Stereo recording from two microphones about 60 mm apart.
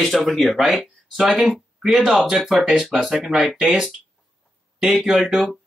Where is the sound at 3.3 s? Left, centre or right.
Centre.